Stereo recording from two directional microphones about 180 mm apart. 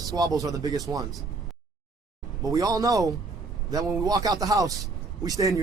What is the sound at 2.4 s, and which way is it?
Speech, 20° right (ahead or behind).